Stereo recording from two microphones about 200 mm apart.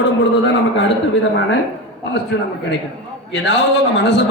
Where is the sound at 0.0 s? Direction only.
60° left (ahead or behind).